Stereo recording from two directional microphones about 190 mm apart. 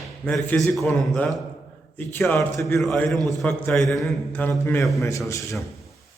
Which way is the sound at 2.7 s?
5° left (ahead or behind).